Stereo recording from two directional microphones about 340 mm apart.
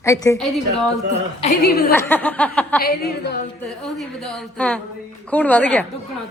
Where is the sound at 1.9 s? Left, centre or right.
Centre.